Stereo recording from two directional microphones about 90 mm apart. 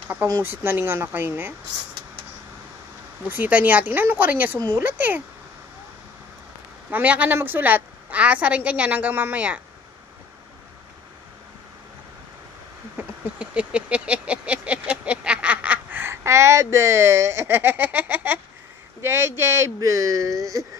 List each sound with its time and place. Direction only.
0.4 s speech: 25° right (ahead or behind)
3.3 s speech: 20° right (ahead or behind)
6.9 s a woman's voice: 15° right (ahead or behind)
12.9 s a sound: 10° right (ahead or behind)
18.9 s speech: 30° right (ahead or behind)